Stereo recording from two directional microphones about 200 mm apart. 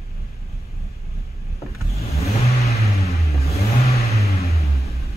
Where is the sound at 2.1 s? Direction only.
30° left (ahead or behind).